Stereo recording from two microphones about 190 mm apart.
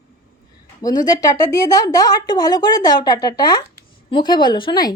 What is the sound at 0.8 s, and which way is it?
A woman's voice, 20° left (ahead or behind).